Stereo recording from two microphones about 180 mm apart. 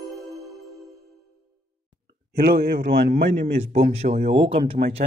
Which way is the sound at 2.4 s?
55° right (ahead or behind).